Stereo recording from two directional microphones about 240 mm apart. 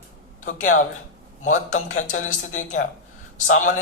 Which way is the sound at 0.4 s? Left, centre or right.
Left.